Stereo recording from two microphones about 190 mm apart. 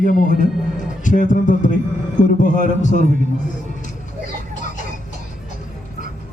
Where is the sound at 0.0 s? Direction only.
45° left (ahead or behind).